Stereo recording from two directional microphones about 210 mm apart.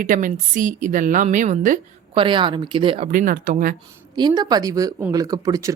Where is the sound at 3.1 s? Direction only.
40° right (ahead or behind).